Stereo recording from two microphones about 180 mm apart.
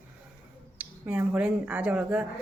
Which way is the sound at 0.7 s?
10° right (ahead or behind).